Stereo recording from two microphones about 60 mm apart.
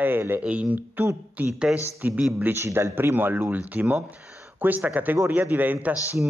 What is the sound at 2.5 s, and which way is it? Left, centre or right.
Speech, right.